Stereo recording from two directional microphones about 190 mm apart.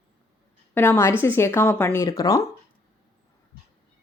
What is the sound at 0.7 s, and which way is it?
Speech, 10° left (ahead or behind).